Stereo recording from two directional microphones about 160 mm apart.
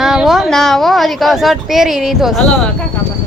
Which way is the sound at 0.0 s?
Centre (ahead or behind).